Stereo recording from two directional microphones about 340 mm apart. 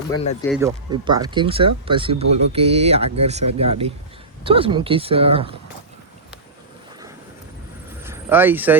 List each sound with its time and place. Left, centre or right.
0.4 s speech: centre
0.9 s speech: centre
8.0 s speech: centre